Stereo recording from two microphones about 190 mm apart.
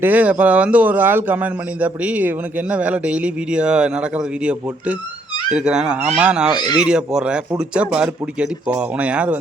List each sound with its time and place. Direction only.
0.0 s a man's voice: 10° right (ahead or behind)